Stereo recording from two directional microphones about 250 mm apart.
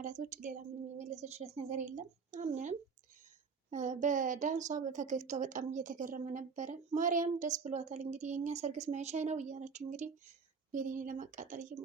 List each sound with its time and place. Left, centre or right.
0.0 s a woman's voice: right